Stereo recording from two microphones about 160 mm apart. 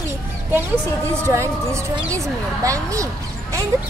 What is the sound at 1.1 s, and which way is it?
A woman's voice, 15° right (ahead or behind).